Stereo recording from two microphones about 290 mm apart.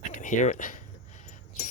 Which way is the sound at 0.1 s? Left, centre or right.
Left.